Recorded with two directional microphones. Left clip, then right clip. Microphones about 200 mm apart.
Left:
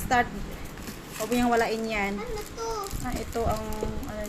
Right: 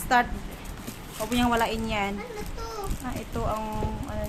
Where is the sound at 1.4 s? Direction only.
5° right (ahead or behind).